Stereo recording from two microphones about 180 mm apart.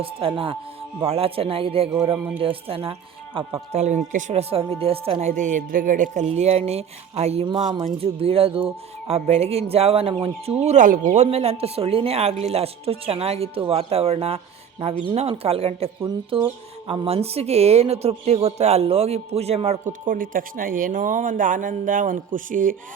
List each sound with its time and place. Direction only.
0.0 s a woman's voice: 30° right (ahead or behind)
10.6 s a woman's voice: 40° right (ahead or behind)